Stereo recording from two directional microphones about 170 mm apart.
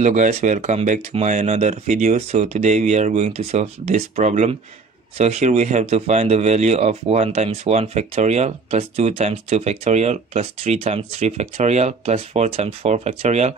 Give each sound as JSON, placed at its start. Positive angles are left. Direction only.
{"t": 0.0, "sound": "speech", "side_deg": -45}